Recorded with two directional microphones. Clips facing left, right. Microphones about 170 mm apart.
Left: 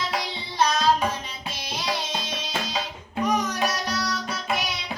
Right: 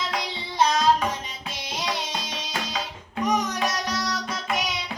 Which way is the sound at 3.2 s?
20° right (ahead or behind).